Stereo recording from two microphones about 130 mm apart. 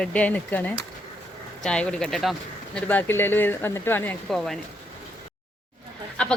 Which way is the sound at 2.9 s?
15° left (ahead or behind).